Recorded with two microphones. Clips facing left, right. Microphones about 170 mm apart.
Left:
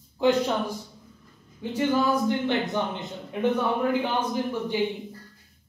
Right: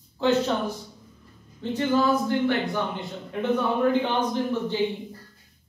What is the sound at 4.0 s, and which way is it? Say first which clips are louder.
Speech: right 1 dB; 10° left (ahead or behind).